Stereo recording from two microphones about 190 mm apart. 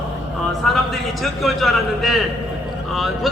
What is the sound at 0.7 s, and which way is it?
A man's voice, centre (ahead or behind).